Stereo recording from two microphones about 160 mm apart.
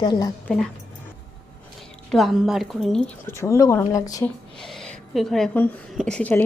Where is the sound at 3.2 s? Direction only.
15° left (ahead or behind).